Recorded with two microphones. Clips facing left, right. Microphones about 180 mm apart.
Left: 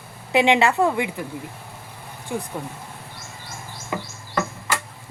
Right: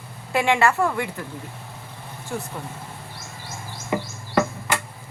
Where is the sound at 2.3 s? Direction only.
15° left (ahead or behind).